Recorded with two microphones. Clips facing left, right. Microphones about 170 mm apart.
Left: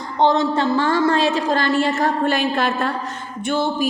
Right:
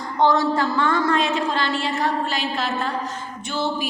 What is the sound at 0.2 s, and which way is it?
A woman's voice, 25° left (ahead or behind).